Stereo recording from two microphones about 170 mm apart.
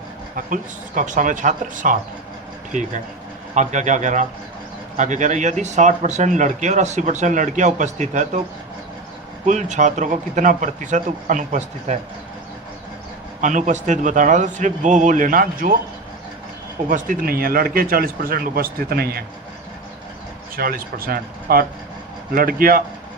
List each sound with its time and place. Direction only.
0.3 s speech: 50° right (ahead or behind)
3.5 s speech: 45° right (ahead or behind)
9.5 s speech: 45° right (ahead or behind)
13.4 s speech: 50° right (ahead or behind)
16.9 s a man's voice: 55° right (ahead or behind)
20.6 s a man's voice: 60° right (ahead or behind)